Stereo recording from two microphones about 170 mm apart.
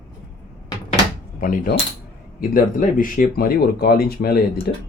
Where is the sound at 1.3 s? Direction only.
55° left (ahead or behind).